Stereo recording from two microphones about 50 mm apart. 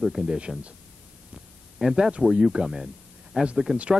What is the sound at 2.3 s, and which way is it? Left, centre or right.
Speech, centre.